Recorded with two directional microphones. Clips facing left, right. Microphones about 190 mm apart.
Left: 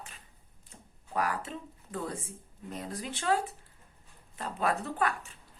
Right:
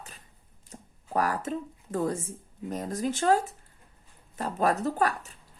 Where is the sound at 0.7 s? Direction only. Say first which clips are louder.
Right 6 dB; 40° right (ahead or behind).